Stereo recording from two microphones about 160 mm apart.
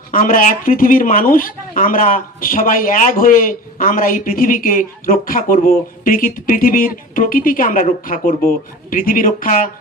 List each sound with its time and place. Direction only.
0.1 s speech: 60° left (ahead or behind)